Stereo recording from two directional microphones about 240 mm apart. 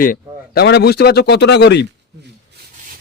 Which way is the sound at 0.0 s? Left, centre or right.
Left.